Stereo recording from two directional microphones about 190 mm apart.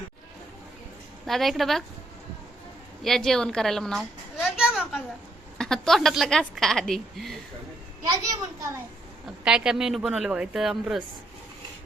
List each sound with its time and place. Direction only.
1.3 s a woman's voice: centre (ahead or behind)
3.0 s a woman's voice: centre (ahead or behind)
4.4 s a sound: 5° right (ahead or behind)
5.5 s a woman's voice: centre (ahead or behind)
8.0 s a child's voice: 15° right (ahead or behind)
9.2 s a woman's voice: 5° right (ahead or behind)